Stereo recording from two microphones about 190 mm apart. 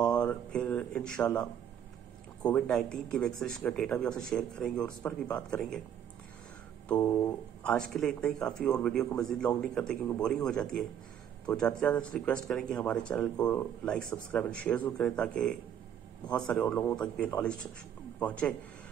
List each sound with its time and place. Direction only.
0.0 s a sound: 20° left (ahead or behind)
0.3 s speech: 5° left (ahead or behind)
6.9 s speech: 10° left (ahead or behind)